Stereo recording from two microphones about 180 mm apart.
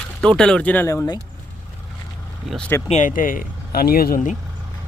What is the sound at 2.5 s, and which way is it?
Speech, 10° left (ahead or behind).